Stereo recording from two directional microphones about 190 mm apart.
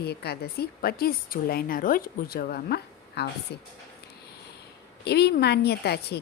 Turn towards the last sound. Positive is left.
turn(degrees=60)  # may be behind; listen again after turning